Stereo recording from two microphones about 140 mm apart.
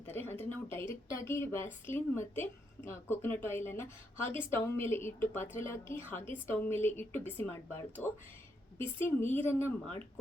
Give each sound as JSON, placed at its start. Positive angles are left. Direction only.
{"t": 0.0, "sound": "a woman's voice", "side_deg": 15}